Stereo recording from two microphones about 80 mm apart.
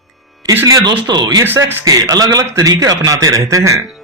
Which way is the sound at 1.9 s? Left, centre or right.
Right.